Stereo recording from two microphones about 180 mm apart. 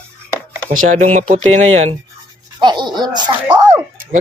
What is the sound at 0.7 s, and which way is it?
Speech, 45° right (ahead or behind).